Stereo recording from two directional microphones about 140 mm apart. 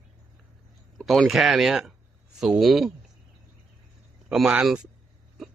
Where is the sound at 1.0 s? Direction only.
Centre (ahead or behind).